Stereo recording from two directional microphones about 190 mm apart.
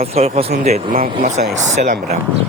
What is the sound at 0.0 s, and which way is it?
Speech, 35° right (ahead or behind).